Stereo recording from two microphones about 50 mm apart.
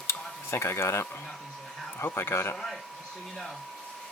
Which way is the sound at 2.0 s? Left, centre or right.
Left.